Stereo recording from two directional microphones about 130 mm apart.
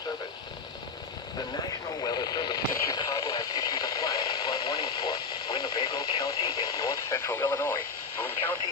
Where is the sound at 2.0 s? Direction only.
30° left (ahead or behind).